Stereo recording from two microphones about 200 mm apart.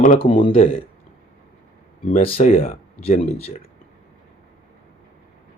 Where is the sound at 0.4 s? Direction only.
30° left (ahead or behind).